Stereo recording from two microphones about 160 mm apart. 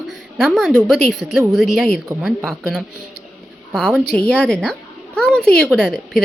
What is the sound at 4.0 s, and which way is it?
A woman's voice, 5° left (ahead or behind).